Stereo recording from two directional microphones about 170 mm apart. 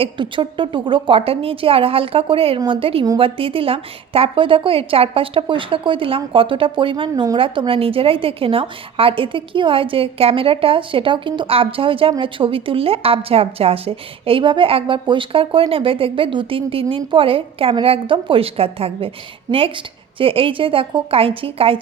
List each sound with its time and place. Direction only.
0.0 s a woman's voice: 30° right (ahead or behind)